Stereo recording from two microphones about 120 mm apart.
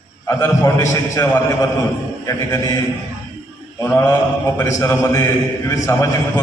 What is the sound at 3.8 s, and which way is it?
A man's voice, 20° left (ahead or behind).